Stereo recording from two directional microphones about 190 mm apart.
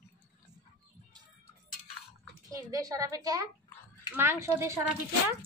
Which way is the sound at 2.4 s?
20° right (ahead or behind).